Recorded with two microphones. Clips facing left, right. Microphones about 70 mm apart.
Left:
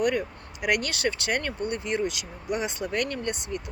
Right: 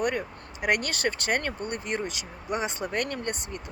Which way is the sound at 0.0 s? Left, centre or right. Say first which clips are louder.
Left 3 dB; right.